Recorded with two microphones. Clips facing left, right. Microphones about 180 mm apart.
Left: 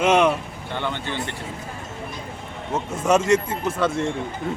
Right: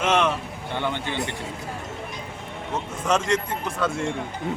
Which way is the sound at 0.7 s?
15° right (ahead or behind).